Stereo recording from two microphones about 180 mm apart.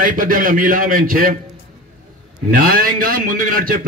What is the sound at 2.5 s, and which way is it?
A man's voice, 50° right (ahead or behind).